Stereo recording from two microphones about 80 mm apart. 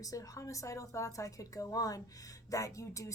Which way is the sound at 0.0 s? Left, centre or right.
Left.